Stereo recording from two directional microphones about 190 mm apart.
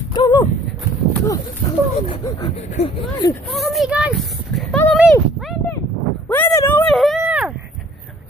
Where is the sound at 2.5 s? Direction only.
35° left (ahead or behind).